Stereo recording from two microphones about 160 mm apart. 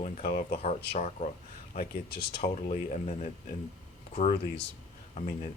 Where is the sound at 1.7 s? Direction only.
70° left (ahead or behind).